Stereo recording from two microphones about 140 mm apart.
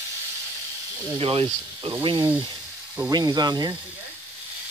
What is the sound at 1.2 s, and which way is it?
Speech, 40° right (ahead or behind).